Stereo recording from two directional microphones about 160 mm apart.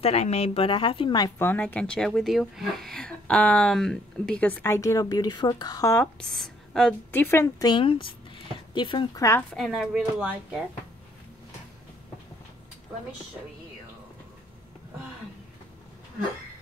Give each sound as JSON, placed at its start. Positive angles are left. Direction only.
{"t": 0.0, "sound": "a woman's voice", "side_deg": 40}
{"t": 1.4, "sound": "speech", "side_deg": 10}
{"t": 6.2, "sound": "speech", "side_deg": 0}
{"t": 9.5, "sound": "speech", "side_deg": 0}